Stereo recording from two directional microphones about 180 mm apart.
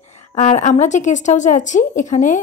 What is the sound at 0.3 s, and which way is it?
A woman's voice, 40° left (ahead or behind).